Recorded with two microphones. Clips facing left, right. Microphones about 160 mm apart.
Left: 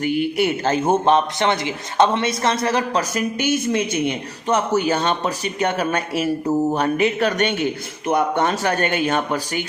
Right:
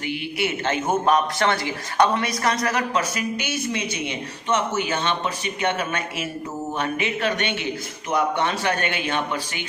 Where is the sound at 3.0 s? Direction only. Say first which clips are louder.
Left 4 dB; 50° left (ahead or behind).